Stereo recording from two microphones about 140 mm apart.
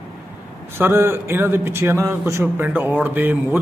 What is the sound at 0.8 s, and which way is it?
A man's voice, 15° right (ahead or behind).